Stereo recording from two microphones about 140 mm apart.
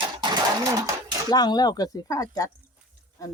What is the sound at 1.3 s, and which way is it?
Speech, 30° left (ahead or behind).